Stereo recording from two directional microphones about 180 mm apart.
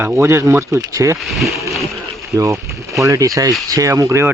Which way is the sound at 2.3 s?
15° right (ahead or behind).